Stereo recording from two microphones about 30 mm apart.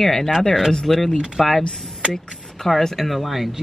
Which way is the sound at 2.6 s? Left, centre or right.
Centre.